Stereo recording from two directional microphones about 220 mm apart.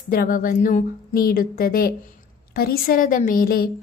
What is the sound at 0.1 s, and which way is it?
A woman's voice, 40° left (ahead or behind).